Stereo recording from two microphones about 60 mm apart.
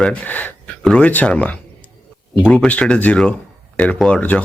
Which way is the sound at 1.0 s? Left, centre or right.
Left.